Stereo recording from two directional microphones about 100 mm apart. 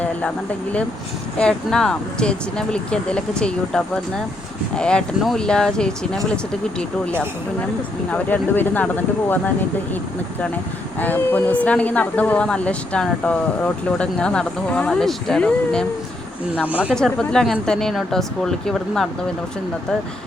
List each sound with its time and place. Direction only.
1.4 s speech: 10° left (ahead or behind)
8.1 s speech: 20° left (ahead or behind)
11.0 s speech: 20° left (ahead or behind)
16.6 s speech: 15° right (ahead or behind)
16.9 s speech: 5° left (ahead or behind)